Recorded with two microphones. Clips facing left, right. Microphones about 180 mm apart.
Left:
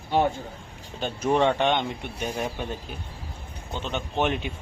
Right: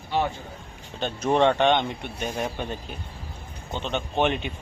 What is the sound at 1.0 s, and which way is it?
Speech, 5° left (ahead or behind).